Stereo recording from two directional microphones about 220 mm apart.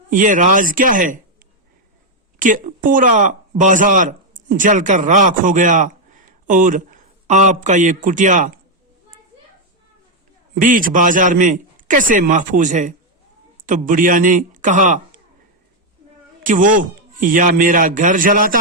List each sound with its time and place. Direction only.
0.1 s a man's voice: 35° right (ahead or behind)
2.4 s a man's voice: 35° right (ahead or behind)
10.5 s a man's voice: 40° right (ahead or behind)
16.4 s a man's voice: 35° right (ahead or behind)